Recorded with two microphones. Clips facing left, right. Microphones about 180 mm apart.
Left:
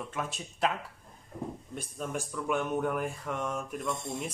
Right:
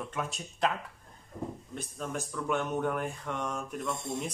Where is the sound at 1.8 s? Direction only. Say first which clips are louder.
Left 1 dB; 10° left (ahead or behind).